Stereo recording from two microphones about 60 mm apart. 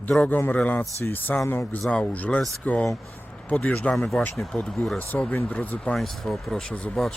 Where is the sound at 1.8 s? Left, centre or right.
Centre.